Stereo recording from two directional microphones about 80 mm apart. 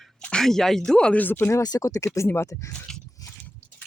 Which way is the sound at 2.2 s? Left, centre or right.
Left.